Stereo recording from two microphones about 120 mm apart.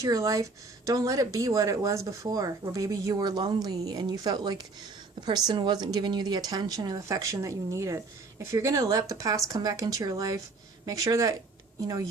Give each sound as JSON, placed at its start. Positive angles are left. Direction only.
{"t": 0.0, "sound": "speech", "side_deg": -30}